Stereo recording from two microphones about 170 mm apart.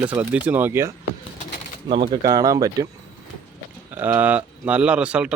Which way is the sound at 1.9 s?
25° right (ahead or behind).